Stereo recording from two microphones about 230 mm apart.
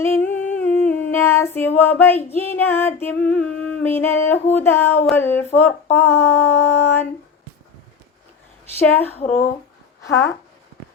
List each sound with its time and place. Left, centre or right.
0.0 s humming: centre
5.0 s female singing: centre
8.8 s female singing: centre
9.1 s speech: left
10.1 s female singing: centre